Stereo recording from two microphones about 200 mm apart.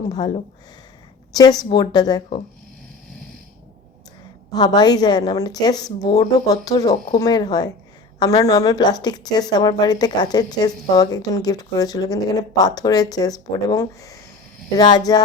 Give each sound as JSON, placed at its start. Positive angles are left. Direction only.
{"t": 1.3, "sound": "speech", "side_deg": 20}
{"t": 4.5, "sound": "speech", "side_deg": 20}